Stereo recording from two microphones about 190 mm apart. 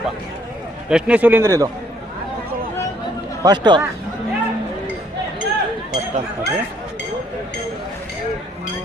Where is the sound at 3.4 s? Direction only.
25° right (ahead or behind).